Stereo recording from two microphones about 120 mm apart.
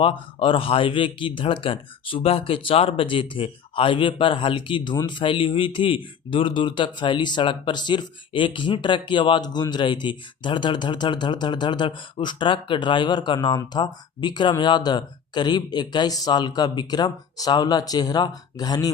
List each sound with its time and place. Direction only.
0.0 s speech: 45° left (ahead or behind)